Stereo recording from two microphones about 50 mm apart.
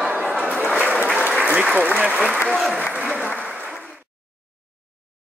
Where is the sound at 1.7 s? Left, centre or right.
Right.